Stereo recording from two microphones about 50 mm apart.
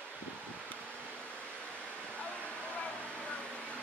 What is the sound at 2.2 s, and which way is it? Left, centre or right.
Waterfall, left.